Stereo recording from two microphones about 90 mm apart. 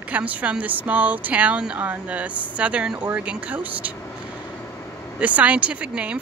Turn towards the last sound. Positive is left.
turn(degrees=-15)  # may be behind; listen again after turning